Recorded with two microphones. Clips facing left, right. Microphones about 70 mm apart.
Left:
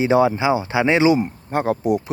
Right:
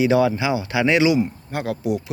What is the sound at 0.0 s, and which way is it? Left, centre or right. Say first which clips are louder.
Speech: left 1 dB; left.